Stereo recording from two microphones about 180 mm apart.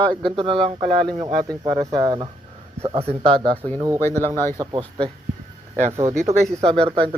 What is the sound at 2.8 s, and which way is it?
Speech, 35° right (ahead or behind).